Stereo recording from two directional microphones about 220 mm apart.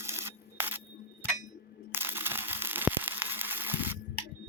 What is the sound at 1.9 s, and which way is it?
Crushing, 10° right (ahead or behind).